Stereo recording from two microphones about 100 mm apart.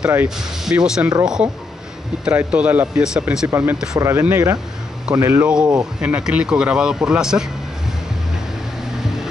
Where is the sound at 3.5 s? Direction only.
25° right (ahead or behind).